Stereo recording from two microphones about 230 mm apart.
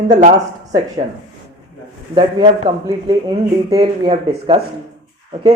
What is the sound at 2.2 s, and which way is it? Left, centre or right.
Speech, right.